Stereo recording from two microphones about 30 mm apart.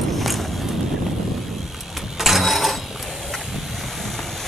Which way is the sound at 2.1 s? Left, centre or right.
Centre.